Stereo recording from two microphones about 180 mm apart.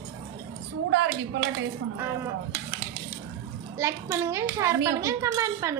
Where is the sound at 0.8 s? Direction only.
80° right.